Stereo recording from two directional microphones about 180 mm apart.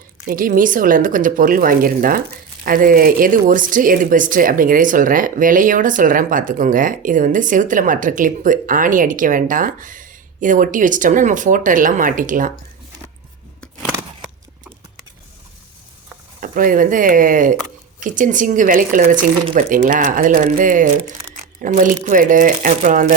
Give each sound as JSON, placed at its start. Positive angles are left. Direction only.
{"t": 0.3, "sound": "speech", "side_deg": -50}
{"t": 16.4, "sound": "speech", "side_deg": -50}